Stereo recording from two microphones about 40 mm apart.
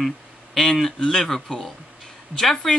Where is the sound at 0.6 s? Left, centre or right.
Centre.